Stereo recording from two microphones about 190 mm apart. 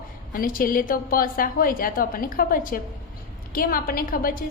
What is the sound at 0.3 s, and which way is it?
A woman's voice, 50° left (ahead or behind).